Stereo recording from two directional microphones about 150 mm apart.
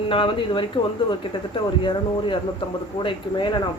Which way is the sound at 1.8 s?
35° left (ahead or behind).